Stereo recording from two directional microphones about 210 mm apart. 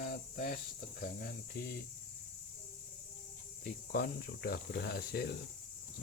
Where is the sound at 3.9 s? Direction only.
50° left (ahead or behind).